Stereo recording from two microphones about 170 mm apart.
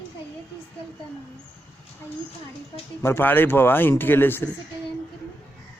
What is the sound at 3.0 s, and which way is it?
Speech, 15° left (ahead or behind).